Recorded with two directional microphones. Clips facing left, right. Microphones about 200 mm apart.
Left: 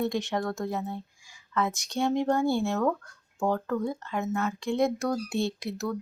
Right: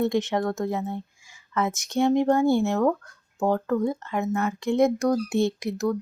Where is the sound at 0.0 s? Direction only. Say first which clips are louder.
Right 5 dB; 20° right (ahead or behind).